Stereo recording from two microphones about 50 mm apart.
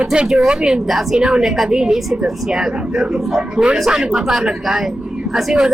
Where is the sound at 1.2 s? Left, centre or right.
Centre.